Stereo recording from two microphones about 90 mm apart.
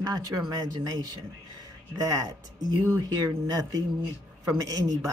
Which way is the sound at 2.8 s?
30° right (ahead or behind).